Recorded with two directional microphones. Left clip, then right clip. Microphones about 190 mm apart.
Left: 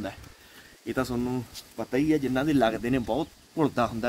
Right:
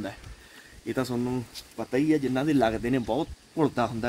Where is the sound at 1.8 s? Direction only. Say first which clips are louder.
Even; centre (ahead or behind).